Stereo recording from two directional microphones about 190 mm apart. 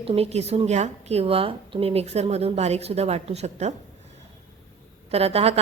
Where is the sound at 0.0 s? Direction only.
30° right (ahead or behind).